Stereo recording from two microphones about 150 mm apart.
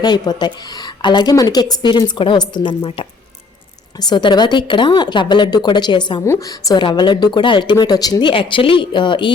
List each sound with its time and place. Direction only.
0.0 s a woman's voice: 25° left (ahead or behind)
6.2 s a woman's voice: 20° left (ahead or behind)